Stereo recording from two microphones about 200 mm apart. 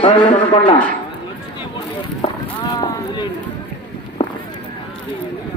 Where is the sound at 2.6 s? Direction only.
20° left (ahead or behind).